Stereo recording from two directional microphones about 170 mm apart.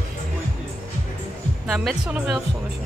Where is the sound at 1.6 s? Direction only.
Centre (ahead or behind).